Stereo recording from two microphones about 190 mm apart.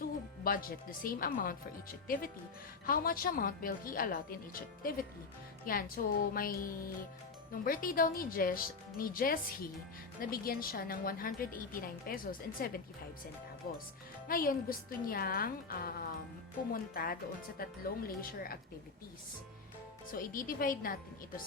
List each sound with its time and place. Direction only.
0.4 s a woman's voice: 50° left (ahead or behind)
2.8 s a woman's voice: 50° left (ahead or behind)
20.1 s a woman's voice: 45° left (ahead or behind)